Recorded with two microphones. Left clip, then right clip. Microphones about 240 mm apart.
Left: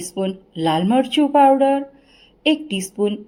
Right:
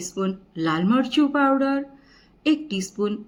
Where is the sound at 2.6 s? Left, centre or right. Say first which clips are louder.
Left 5 dB; centre.